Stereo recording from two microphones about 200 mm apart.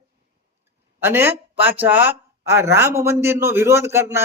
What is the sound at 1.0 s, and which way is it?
A woman's voice, 10° right (ahead or behind).